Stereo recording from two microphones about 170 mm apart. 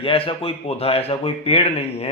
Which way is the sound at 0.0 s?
35° left (ahead or behind).